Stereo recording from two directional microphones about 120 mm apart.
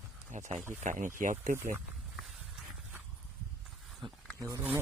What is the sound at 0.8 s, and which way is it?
Speech, 90° right.